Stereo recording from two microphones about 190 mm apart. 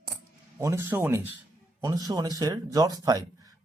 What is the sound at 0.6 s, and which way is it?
Speech, 15° right (ahead or behind).